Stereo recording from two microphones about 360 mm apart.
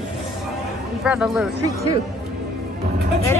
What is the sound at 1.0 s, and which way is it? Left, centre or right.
Speech, centre.